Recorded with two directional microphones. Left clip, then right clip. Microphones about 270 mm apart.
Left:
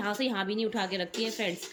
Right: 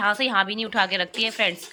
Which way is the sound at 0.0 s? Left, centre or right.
Centre.